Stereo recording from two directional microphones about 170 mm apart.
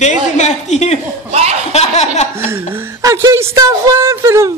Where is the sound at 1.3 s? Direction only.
40° right (ahead or behind).